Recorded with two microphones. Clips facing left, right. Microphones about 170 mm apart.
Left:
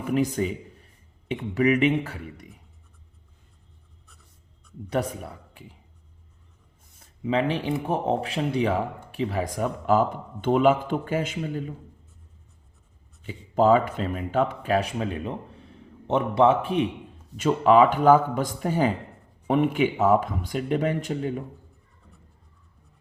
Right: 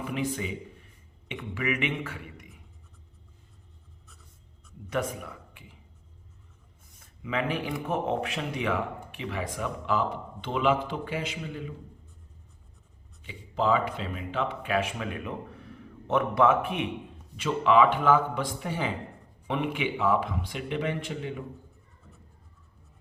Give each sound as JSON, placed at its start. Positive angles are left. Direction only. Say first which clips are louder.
{"t": 0.0, "sound": "speech", "louder": "left 7 dB", "side_deg": 45}
{"t": 4.9, "sound": "speech", "louder": "left 3 dB", "side_deg": 35}
{"t": 7.0, "sound": "speech", "louder": "left 6 dB", "side_deg": 30}
{"t": 13.2, "sound": "speech", "louder": "left 7 dB", "side_deg": 45}
{"t": 17.3, "sound": "speech", "louder": "left 4 dB", "side_deg": 45}